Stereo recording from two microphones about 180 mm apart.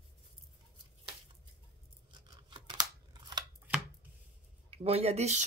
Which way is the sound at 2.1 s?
25° right (ahead or behind).